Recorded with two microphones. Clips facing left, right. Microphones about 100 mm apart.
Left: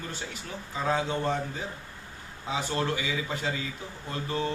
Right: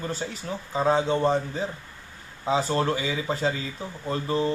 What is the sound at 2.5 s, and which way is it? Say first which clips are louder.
A man's voice: right 6 dB; 35° right (ahead or behind).